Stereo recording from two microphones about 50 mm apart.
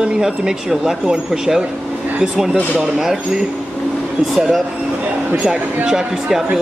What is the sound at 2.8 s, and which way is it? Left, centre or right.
Speech, centre.